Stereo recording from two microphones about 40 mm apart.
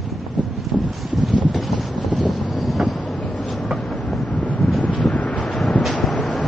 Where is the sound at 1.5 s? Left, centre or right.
Centre.